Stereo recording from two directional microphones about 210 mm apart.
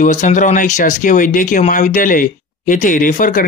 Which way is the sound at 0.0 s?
35° left (ahead or behind).